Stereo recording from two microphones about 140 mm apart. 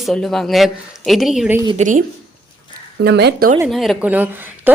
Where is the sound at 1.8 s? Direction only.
65° right (ahead or behind).